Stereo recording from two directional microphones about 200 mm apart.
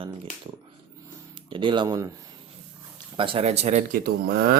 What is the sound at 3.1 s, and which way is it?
Speech, 25° right (ahead or behind).